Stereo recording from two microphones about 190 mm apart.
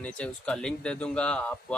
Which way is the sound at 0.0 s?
5° left (ahead or behind).